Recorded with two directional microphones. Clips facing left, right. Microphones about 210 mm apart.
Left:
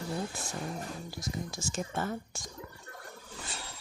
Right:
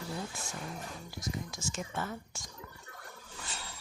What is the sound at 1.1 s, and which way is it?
Speech, 30° left (ahead or behind).